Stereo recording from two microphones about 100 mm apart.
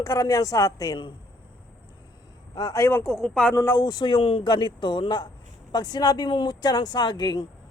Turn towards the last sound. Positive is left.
turn(degrees=45)  # may be behind; listen again after turning